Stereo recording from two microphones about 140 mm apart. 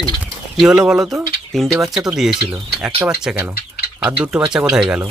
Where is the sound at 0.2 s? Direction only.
5° right (ahead or behind).